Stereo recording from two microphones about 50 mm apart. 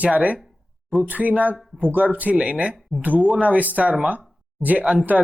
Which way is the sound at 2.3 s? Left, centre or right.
Right.